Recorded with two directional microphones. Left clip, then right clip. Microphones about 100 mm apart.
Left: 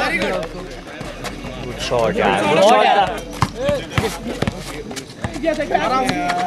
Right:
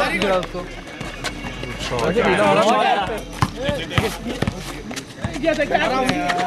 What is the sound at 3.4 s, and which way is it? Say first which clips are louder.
Speech: left 4 dB; 15° left (ahead or behind).